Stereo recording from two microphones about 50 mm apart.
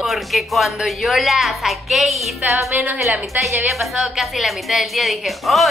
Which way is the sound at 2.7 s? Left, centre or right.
Right.